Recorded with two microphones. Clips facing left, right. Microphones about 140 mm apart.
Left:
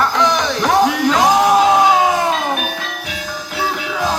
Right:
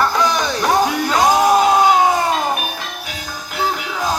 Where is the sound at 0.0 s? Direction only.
Centre (ahead or behind).